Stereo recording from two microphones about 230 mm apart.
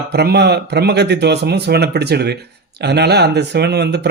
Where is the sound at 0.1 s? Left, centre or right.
Right.